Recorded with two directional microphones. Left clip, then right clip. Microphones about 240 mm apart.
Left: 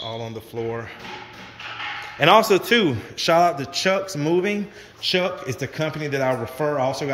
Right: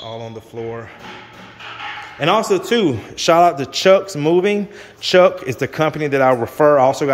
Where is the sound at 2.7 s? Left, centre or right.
Centre.